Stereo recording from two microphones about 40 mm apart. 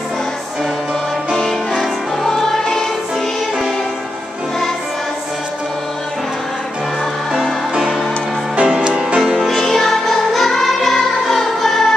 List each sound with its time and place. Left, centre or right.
1.8 s music: centre
8.6 s music: right
9.4 s music: centre